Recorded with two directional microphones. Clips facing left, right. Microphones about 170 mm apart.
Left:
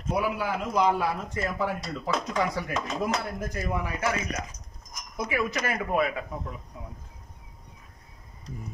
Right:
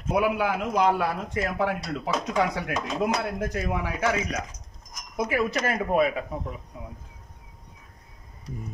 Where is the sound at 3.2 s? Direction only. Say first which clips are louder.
Right 4 dB; 85° right.